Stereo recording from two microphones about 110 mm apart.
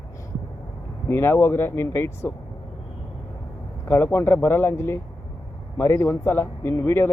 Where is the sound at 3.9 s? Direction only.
20° left (ahead or behind).